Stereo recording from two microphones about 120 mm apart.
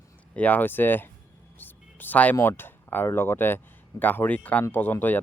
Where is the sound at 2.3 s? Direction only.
20° left (ahead or behind).